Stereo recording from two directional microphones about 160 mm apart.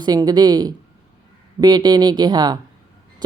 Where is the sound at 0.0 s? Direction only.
25° right (ahead or behind).